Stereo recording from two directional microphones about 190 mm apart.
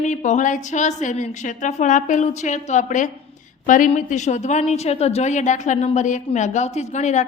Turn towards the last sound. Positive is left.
turn(degrees=40)  # may be behind; listen again after turning